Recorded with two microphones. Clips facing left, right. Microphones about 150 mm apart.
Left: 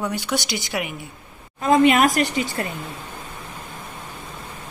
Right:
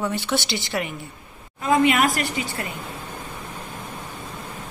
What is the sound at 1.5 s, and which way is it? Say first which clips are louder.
Speech: left 3 dB; 25° left (ahead or behind).